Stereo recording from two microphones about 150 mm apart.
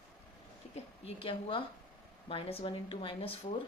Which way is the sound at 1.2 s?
35° left (ahead or behind).